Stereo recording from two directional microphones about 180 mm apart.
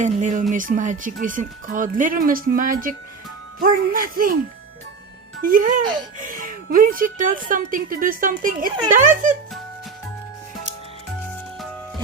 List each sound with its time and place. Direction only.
0.0 s a woman's voice: 45° right (ahead or behind)
5.4 s a woman's voice: 50° right (ahead or behind)